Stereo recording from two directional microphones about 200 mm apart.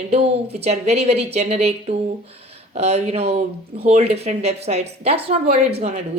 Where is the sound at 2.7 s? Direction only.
35° right (ahead or behind).